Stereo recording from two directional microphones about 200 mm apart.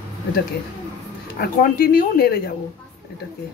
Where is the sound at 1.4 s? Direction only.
50° left (ahead or behind).